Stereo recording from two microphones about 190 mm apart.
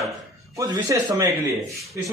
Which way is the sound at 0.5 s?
20° right (ahead or behind).